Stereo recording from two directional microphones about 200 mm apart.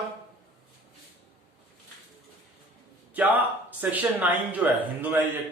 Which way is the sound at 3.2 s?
10° right (ahead or behind).